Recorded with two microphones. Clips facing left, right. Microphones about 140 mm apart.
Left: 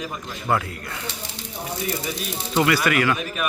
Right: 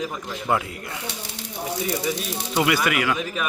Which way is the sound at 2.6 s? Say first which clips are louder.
Left 2 dB; 15° right (ahead or behind).